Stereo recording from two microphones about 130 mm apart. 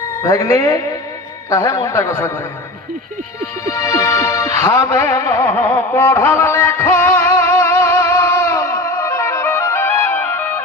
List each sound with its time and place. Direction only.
0.2 s a man's voice: 25° left (ahead or behind)
3.7 s music: 20° left (ahead or behind)